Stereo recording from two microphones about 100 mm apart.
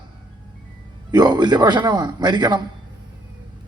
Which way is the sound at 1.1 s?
45° right (ahead or behind).